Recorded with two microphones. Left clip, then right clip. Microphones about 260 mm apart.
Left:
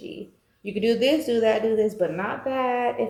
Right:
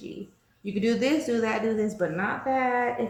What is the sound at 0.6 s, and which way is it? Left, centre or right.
A woman's voice, centre.